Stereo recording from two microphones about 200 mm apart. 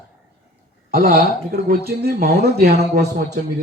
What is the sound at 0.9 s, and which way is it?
A man's voice, 45° right (ahead or behind).